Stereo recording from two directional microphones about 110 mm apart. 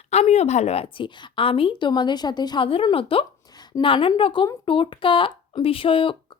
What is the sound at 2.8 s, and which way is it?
A woman's voice, 55° left (ahead or behind).